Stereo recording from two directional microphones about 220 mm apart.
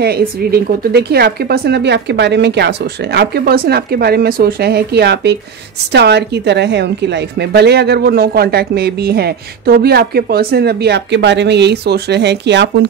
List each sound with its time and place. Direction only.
0.0 s a woman's voice: 45° right (ahead or behind)